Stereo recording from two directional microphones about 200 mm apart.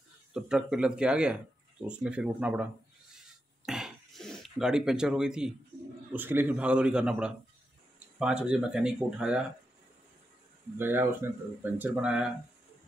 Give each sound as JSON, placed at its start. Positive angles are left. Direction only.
{"t": 0.3, "sound": "speech", "side_deg": -5}
{"t": 3.2, "sound": "throat clearing", "side_deg": 0}
{"t": 6.1, "sound": "speech", "side_deg": -10}
{"t": 10.8, "sound": "speech", "side_deg": -10}